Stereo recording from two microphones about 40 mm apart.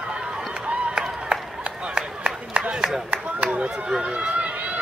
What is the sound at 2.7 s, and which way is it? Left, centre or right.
Speech, centre.